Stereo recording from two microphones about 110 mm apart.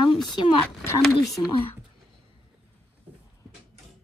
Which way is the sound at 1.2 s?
Centre (ahead or behind).